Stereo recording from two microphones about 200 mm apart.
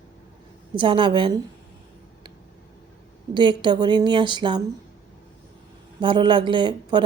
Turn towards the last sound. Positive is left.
turn(degrees=-25)  # may be behind; listen again after turning